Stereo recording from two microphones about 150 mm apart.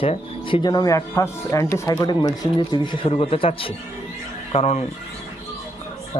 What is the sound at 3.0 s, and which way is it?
Speech, 40° left (ahead or behind).